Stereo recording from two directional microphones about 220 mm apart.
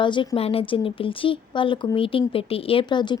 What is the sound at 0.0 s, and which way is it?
Speech, 20° left (ahead or behind).